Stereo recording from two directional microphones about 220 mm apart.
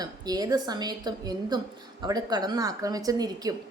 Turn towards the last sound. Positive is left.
turn(degrees=-15)  # may be behind; listen again after turning